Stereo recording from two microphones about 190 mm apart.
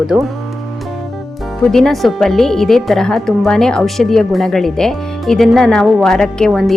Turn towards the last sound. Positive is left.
turn(degrees=0)  # may be behind; listen again after turning